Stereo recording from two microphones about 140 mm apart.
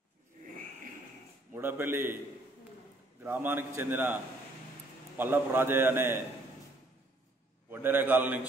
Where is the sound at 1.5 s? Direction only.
15° right (ahead or behind).